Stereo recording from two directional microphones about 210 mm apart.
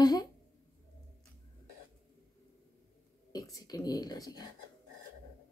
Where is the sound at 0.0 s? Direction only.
20° left (ahead or behind).